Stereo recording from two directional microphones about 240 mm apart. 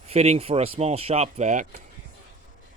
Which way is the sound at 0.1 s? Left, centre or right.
Right.